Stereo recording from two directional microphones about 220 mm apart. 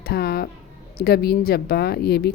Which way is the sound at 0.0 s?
45° left (ahead or behind).